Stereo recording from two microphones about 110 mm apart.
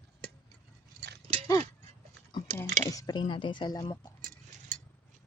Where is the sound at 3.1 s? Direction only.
45° left (ahead or behind).